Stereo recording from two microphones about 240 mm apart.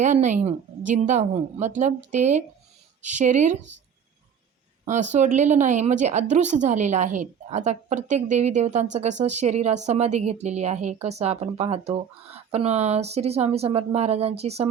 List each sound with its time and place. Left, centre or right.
0.0 s a woman's voice: right
5.1 s a woman's voice: right